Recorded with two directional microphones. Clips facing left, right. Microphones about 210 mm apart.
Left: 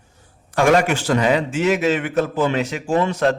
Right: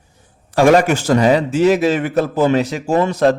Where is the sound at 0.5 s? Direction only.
35° right (ahead or behind).